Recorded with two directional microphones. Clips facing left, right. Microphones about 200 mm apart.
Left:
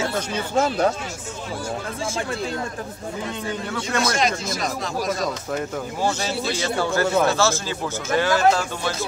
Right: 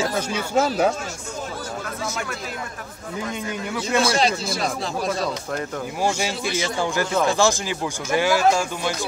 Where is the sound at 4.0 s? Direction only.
30° right (ahead or behind).